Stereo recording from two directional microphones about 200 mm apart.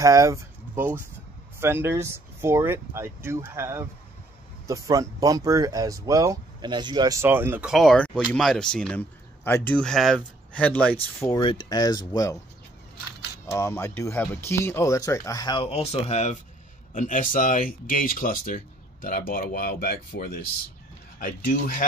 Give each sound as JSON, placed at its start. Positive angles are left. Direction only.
{"t": 0.0, "sound": "speech", "side_deg": -15}
{"t": 11.3, "sound": "speech", "side_deg": 20}
{"t": 13.5, "sound": "speech", "side_deg": 15}